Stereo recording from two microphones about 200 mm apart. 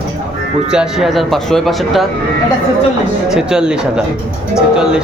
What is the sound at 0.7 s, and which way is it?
Speech, 5° right (ahead or behind).